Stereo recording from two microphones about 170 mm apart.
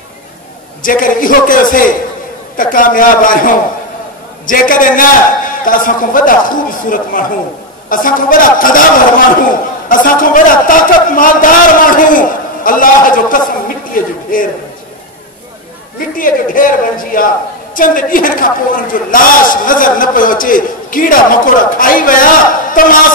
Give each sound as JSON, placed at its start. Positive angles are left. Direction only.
{"t": 0.8, "sound": "a woman's voice", "side_deg": 55}
{"t": 9.8, "sound": "a woman's voice", "side_deg": 55}
{"t": 16.2, "sound": "a woman's voice", "side_deg": 55}